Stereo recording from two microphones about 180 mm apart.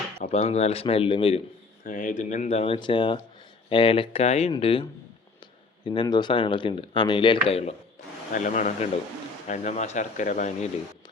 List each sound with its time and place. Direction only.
0.3 s speech: 35° left (ahead or behind)
1.8 s speech: 45° left (ahead or behind)
8.3 s a man's voice: 45° left (ahead or behind)